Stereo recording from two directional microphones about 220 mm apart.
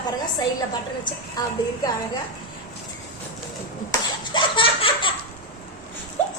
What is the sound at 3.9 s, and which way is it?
Laughter, 20° left (ahead or behind).